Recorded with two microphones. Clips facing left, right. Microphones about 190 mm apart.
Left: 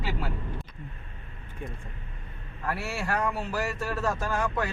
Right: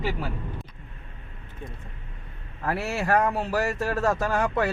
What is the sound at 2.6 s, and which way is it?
Speech, 55° right (ahead or behind).